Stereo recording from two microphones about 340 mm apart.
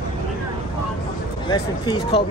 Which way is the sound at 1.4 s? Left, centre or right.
Centre.